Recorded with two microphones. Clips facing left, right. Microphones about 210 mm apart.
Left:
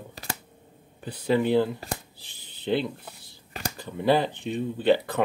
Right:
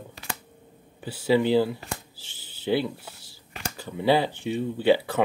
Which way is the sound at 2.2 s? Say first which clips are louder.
Right 1 dB; 70° right (ahead or behind).